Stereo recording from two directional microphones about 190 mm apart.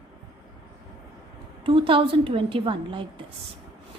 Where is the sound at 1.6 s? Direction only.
30° right (ahead or behind).